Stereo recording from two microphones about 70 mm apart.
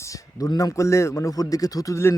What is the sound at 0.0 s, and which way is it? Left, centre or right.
A man's voice, left.